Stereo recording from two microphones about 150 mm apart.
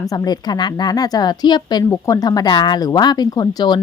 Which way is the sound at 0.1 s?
25° left (ahead or behind).